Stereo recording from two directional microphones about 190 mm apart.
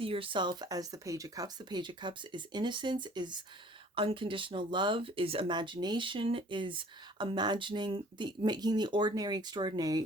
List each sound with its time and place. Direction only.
0.0 s speech: 30° right (ahead or behind)